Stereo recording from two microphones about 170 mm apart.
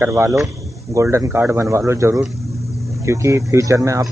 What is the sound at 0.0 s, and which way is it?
Speech, 15° right (ahead or behind).